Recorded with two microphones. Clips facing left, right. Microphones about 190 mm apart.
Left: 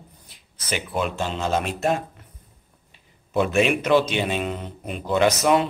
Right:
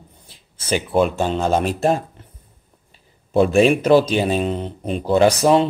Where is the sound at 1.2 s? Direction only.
45° right (ahead or behind).